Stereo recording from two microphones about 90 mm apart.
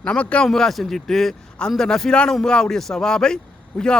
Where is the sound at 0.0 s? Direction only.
15° left (ahead or behind).